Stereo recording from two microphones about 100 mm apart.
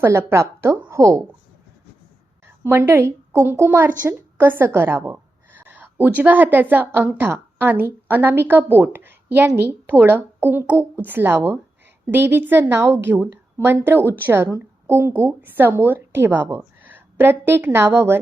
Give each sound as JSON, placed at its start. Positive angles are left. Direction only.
{"t": 0.0, "sound": "a woman's voice", "side_deg": -25}
{"t": 2.6, "sound": "a woman's voice", "side_deg": -25}